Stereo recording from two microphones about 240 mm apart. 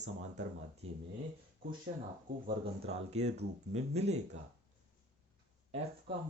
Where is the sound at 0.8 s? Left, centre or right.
Right.